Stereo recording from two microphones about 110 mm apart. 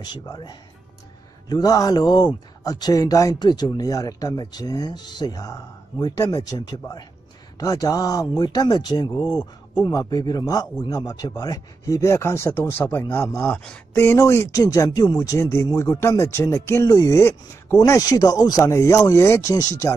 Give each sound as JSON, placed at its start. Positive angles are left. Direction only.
{"t": 0.0, "sound": "speech", "side_deg": 40}